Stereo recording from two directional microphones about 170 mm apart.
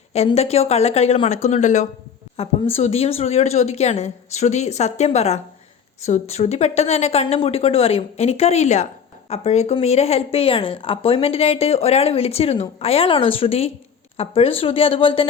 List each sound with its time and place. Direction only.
0.3 s speech: 35° left (ahead or behind)